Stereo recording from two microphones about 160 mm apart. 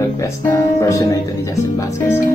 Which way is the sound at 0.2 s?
20° left (ahead or behind).